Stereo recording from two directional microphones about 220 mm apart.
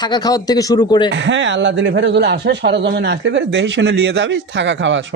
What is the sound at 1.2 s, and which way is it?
Speech, 55° right (ahead or behind).